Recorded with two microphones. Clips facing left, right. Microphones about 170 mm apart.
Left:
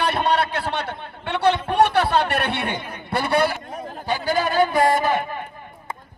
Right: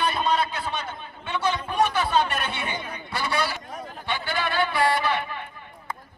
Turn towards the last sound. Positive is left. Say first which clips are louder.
# left 5 dB
turn(degrees=45)  # may be behind; listen again after turning